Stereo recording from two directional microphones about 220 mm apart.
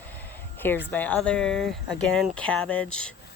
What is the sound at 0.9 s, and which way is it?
Speech, 10° left (ahead or behind).